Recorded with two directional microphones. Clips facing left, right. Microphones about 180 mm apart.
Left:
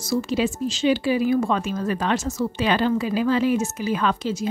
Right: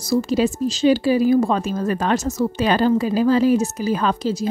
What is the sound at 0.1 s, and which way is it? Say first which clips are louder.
Speech: right 4 dB; 40° right (ahead or behind).